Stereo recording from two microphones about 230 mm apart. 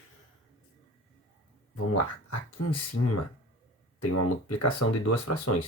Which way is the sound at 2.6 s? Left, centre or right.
Left.